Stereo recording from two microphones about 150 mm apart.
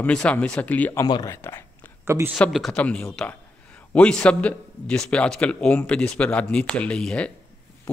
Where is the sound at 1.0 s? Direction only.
25° left (ahead or behind).